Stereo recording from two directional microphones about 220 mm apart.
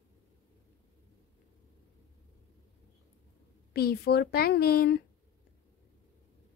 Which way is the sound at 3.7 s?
45° left (ahead or behind).